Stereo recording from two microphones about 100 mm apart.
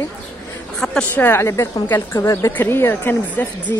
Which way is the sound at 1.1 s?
20° left (ahead or behind).